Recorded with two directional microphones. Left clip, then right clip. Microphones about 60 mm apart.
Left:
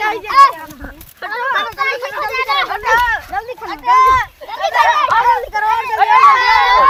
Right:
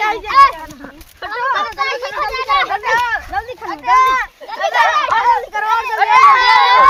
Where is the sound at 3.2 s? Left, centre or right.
Left.